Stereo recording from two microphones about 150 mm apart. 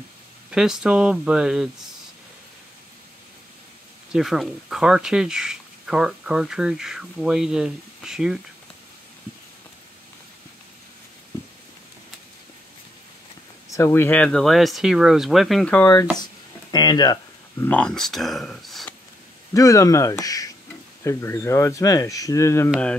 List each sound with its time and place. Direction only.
0.5 s speech: 5° right (ahead or behind)
4.1 s speech: centre (ahead or behind)
13.7 s speech: 20° left (ahead or behind)
17.6 s speech: 5° left (ahead or behind)
19.5 s speech: 20° left (ahead or behind)